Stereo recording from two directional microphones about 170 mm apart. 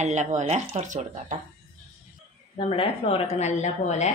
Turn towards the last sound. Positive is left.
turn(degrees=45)  # may be behind; listen again after turning